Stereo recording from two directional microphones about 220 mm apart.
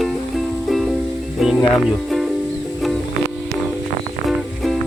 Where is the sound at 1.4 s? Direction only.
Centre (ahead or behind).